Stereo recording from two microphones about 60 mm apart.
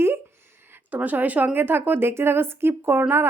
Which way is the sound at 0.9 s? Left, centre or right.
Right.